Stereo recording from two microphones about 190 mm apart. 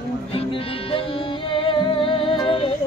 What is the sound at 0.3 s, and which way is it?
Music, 30° left (ahead or behind).